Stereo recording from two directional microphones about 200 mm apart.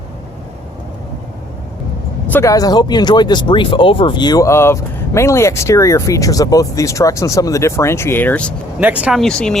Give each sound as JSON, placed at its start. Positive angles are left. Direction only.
{"t": 2.3, "sound": "speech", "side_deg": 15}
{"t": 8.8, "sound": "speech", "side_deg": -5}